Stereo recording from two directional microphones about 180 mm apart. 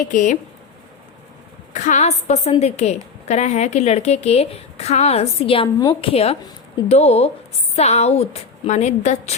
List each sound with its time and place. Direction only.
0.1 s speech: 45° left (ahead or behind)
1.7 s a woman's voice: 45° left (ahead or behind)
5.6 s a woman's voice: 15° left (ahead or behind)
6.0 s a woman's voice: 30° left (ahead or behind)